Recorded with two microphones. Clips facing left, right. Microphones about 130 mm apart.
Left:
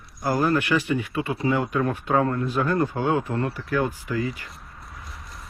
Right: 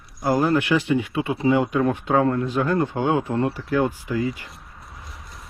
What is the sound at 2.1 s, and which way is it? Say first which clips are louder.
Speech: right 2 dB; 30° right (ahead or behind).